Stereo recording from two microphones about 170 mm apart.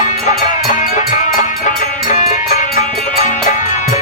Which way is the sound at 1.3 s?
50° left (ahead or behind).